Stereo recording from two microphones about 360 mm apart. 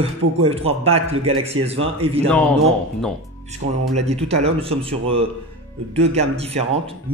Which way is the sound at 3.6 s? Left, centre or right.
Centre.